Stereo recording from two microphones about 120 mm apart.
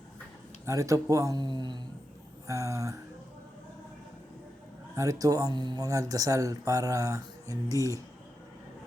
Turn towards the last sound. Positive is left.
turn(degrees=-30)  # may be behind; listen again after turning